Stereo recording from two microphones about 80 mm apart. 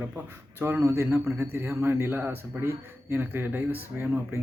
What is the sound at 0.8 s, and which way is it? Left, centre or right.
Speech, right.